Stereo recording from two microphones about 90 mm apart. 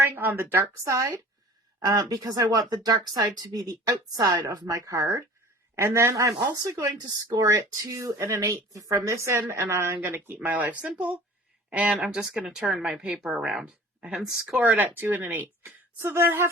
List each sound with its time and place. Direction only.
0.0 s a woman's voice: 20° right (ahead or behind)
0.5 s speech: 35° right (ahead or behind)
7.4 s speech: 35° right (ahead or behind)
10.4 s speech: 15° right (ahead or behind)
14.6 s speech: 20° right (ahead or behind)